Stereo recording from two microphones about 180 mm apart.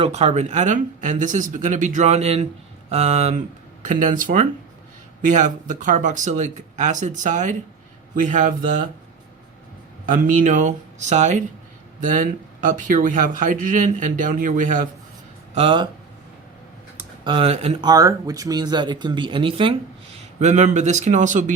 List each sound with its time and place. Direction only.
0.0 s speech: 35° right (ahead or behind)
10.1 s speech: 45° right (ahead or behind)
15.5 s speech: 30° right (ahead or behind)
17.2 s speech: 30° right (ahead or behind)
20.4 s speech: 40° right (ahead or behind)